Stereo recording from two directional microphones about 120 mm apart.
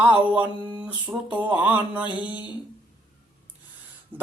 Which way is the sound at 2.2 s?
40° left (ahead or behind).